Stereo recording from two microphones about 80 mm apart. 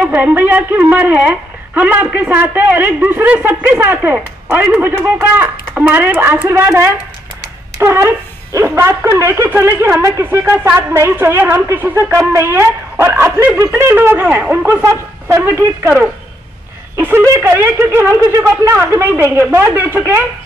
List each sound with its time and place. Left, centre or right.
0.0 s a woman's voice: right
14.7 s a woman's voice: right
17.0 s a woman's voice: right